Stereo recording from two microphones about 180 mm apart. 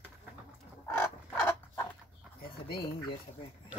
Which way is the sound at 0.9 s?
10° left (ahead or behind).